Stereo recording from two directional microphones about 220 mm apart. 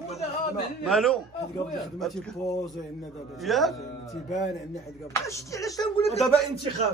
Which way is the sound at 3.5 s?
Centre (ahead or behind).